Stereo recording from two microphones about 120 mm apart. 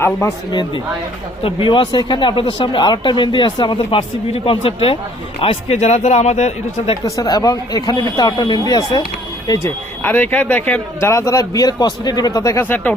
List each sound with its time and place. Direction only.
0.0 s speech: 25° left (ahead or behind)
1.5 s speech: 45° left (ahead or behind)
5.7 s speech: 70° left (ahead or behind)
7.0 s speech: 35° left (ahead or behind)
10.0 s speech: 15° left (ahead or behind)
11.1 s speech: 25° left (ahead or behind)